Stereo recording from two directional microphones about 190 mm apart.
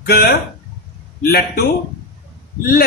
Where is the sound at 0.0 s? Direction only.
55° left (ahead or behind).